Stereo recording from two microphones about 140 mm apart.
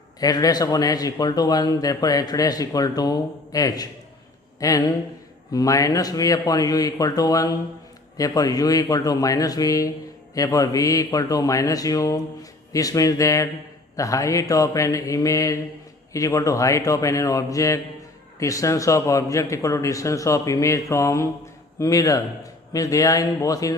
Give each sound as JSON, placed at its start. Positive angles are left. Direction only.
{"t": 0.2, "sound": "a man's voice", "side_deg": 25}